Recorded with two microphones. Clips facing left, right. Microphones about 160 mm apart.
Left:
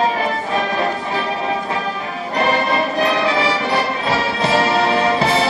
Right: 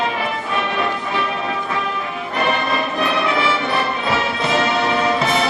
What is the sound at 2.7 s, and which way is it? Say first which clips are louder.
Music: left 3 dB; 30° left (ahead or behind).